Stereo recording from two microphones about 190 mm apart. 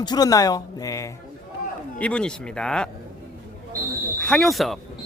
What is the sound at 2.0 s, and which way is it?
Speech, 5° left (ahead or behind).